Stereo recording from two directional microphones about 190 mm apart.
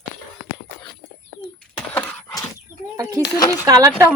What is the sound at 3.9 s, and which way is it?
Speech, 5° right (ahead or behind).